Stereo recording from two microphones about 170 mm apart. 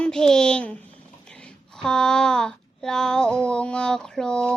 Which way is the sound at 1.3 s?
5° left (ahead or behind).